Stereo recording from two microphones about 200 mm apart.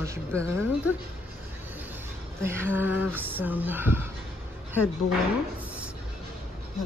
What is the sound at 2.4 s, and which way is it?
Speech, 10° right (ahead or behind).